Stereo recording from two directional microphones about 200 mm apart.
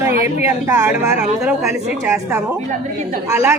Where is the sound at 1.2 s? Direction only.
5° right (ahead or behind).